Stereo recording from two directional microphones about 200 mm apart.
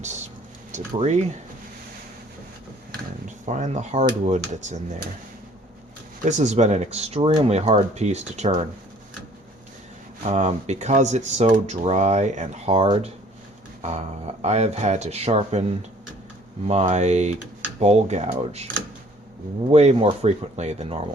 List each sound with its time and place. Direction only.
0.0 s speech: 35° right (ahead or behind)
3.4 s speech: 35° right (ahead or behind)
6.2 s speech: 35° right (ahead or behind)
10.2 s speech: 35° right (ahead or behind)
14.4 s speech: 35° right (ahead or behind)
19.7 s speech: 30° right (ahead or behind)